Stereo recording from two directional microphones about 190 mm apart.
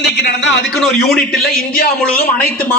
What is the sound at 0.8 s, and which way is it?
A man's voice, centre (ahead or behind).